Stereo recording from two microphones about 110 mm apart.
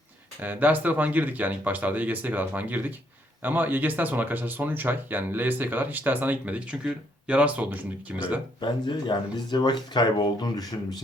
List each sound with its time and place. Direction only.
0.4 s speech: 15° right (ahead or behind)
8.6 s speech: 45° left (ahead or behind)